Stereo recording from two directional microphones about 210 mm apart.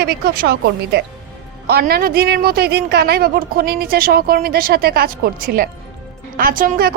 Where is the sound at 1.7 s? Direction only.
50° right (ahead or behind).